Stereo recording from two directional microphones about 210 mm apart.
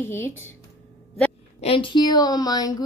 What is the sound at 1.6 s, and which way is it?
A woman's voice, 25° left (ahead or behind).